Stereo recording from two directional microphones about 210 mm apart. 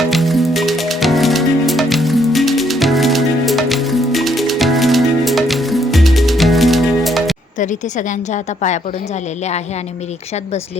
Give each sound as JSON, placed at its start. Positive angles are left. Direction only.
{"t": 0.1, "sound": "music", "side_deg": 0}
{"t": 7.6, "sound": "a woman's voice", "side_deg": 35}